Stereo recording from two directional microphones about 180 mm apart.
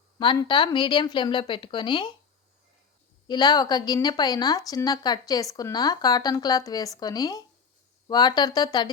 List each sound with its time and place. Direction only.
0.2 s a woman's voice: 25° left (ahead or behind)
3.2 s a woman's voice: 25° left (ahead or behind)